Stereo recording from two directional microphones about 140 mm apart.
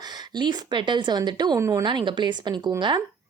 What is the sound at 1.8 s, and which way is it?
A woman's voice, 35° right (ahead or behind).